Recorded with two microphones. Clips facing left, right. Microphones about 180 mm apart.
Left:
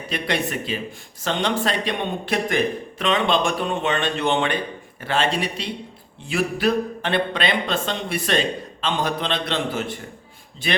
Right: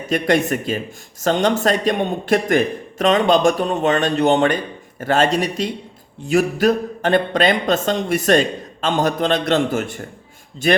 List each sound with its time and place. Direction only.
0.1 s speech: 45° right (ahead or behind)